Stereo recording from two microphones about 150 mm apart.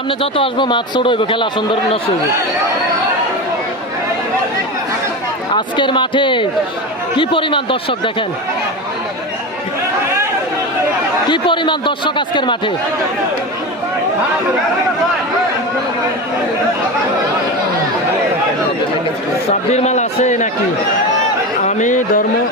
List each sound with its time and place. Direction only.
0.2 s a man's voice: 35° left (ahead or behind)
5.5 s a man's voice: 30° left (ahead or behind)
11.3 s a man's voice: 30° left (ahead or behind)
19.7 s a man's voice: 50° left (ahead or behind)
21.6 s speech: 55° left (ahead or behind)